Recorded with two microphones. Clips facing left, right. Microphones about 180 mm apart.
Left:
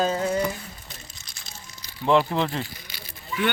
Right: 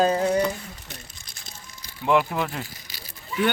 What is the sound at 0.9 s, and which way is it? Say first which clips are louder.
Crumpling: right 2 dB; 50° right (ahead or behind).